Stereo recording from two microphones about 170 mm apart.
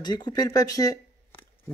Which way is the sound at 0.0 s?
25° left (ahead or behind).